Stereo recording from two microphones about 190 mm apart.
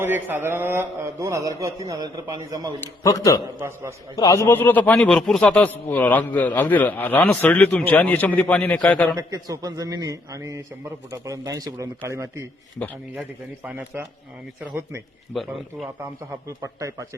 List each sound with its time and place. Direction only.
0.0 s a man's voice: 10° right (ahead or behind)
2.8 s a man's voice: 15° left (ahead or behind)
3.4 s a man's voice: 15° right (ahead or behind)
4.1 s a man's voice: 20° left (ahead or behind)
9.1 s a man's voice: 20° right (ahead or behind)
13.7 s a man's voice: 10° right (ahead or behind)
16.6 s a man's voice: 15° right (ahead or behind)